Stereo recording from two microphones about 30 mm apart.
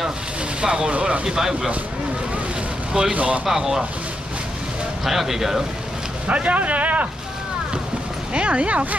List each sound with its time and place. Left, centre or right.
0.6 s speech: right
1.2 s speech: right
2.9 s speech: right
3.4 s speech: centre
5.0 s speech: centre
6.2 s a man's voice: right
8.3 s speech: right